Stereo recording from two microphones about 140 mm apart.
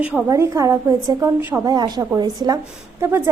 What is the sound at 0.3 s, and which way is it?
A woman's voice, 20° right (ahead or behind).